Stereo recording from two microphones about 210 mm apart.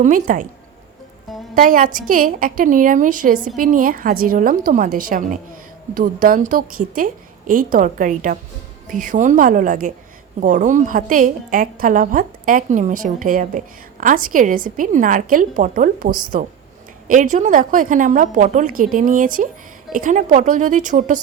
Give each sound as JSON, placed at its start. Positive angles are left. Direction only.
{"t": 0.0, "sound": "a woman's voice", "side_deg": -40}
{"t": 1.5, "sound": "a woman's voice", "side_deg": -40}